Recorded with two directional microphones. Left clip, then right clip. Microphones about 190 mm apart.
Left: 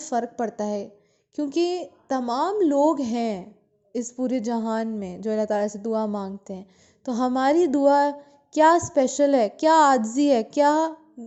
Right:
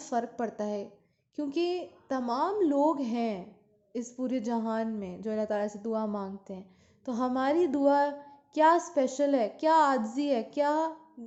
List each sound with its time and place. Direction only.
0.0 s a woman's voice: 35° left (ahead or behind)